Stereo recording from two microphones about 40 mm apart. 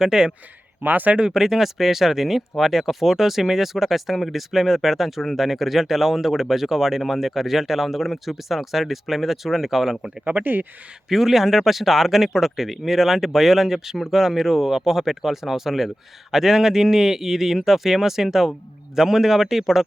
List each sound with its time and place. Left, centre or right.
0.0 s speech: centre
0.8 s a man's voice: right
1.2 s speech: centre
10.4 s a man's voice: right
11.1 s speech: centre